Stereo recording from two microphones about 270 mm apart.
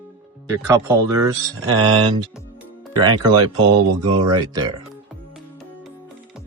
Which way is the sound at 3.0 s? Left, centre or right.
Centre.